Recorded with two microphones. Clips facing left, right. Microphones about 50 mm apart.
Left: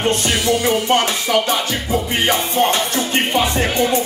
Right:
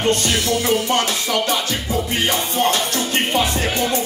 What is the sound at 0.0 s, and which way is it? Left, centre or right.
Music, centre.